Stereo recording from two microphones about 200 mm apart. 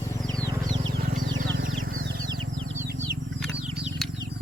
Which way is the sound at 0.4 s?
15° right (ahead or behind).